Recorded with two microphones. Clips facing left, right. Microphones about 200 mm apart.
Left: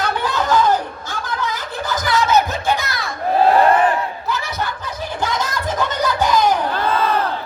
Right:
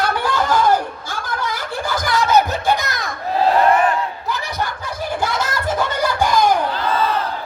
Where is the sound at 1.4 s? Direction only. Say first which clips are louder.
Even; 10° right (ahead or behind).